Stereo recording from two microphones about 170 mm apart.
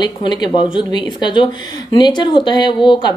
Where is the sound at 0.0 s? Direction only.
25° left (ahead or behind).